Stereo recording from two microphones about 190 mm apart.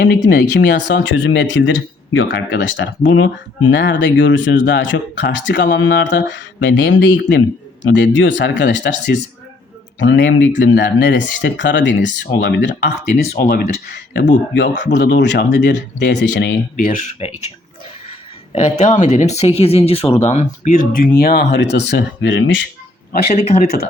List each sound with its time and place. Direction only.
0.0 s speech: 60° left (ahead or behind)
13.1 s speech: 50° left (ahead or behind); by 17.5 s 35° left (ahead or behind)
18.5 s speech: 40° left (ahead or behind); by 22.6 s 75° left (ahead or behind)
23.3 s speech: 35° left (ahead or behind)